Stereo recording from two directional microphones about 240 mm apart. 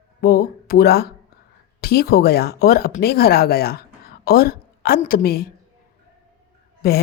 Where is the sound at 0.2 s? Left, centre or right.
Left.